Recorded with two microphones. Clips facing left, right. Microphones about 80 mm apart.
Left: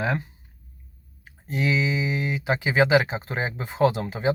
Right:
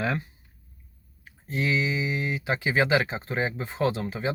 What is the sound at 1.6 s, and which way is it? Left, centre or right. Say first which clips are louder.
Speech: left 2 dB; left.